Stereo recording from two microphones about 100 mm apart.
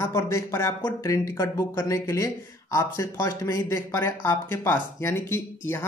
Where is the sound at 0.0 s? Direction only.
25° left (ahead or behind).